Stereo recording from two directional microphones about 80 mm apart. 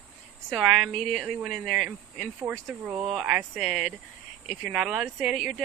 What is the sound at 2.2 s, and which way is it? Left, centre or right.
Speech, right.